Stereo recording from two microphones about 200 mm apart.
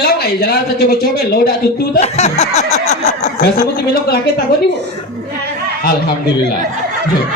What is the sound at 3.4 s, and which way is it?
Speech, 45° left (ahead or behind).